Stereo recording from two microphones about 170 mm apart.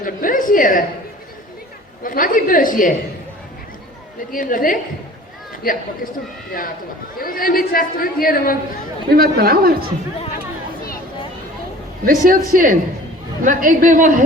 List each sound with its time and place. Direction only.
0.0 s a sound: 55° left (ahead or behind)
2.0 s a woman's voice: 55° left (ahead or behind)
4.3 s a woman's voice: 55° left (ahead or behind)
7.2 s a man's voice: 55° left (ahead or behind)
9.1 s speech: 60° right (ahead or behind)
12.0 s a man's voice: 55° right (ahead or behind)